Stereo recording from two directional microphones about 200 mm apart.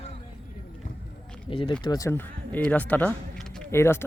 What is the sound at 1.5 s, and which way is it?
Speech, 25° left (ahead or behind).